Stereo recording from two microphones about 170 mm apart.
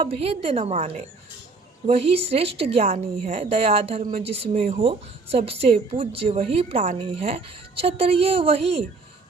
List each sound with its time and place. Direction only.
0.0 s a woman's voice: 35° right (ahead or behind)